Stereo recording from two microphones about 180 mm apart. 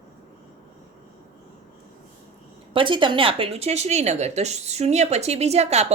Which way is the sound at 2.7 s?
25° right (ahead or behind).